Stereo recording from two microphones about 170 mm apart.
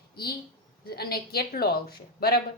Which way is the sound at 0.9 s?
65° left (ahead or behind).